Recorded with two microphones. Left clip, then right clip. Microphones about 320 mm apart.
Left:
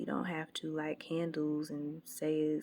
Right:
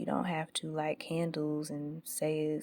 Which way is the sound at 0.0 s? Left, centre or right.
Right.